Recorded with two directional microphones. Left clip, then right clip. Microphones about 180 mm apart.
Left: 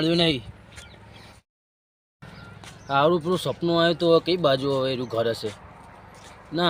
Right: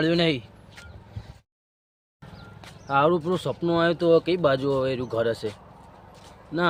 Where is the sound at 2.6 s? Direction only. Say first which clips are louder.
Even; centre (ahead or behind).